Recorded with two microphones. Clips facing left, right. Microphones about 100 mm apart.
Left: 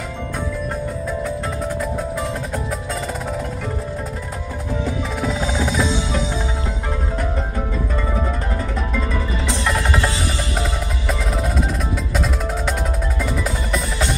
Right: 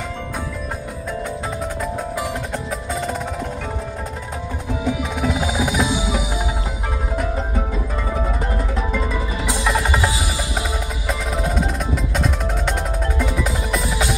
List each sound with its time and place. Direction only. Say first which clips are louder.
4.8 s music: right 3 dB; 5° right (ahead or behind)
8.9 s music: even; 5° right (ahead or behind)
11.1 s percussion: even; centre (ahead or behind)
13.2 s music: even; centre (ahead or behind)